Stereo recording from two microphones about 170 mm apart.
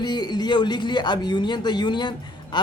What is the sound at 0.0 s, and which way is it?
Speech, 25° left (ahead or behind).